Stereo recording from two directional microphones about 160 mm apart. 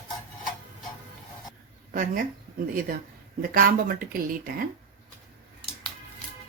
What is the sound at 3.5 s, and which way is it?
Speech, 60° right (ahead or behind).